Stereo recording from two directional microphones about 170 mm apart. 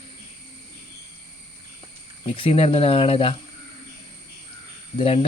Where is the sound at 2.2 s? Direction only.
35° left (ahead or behind).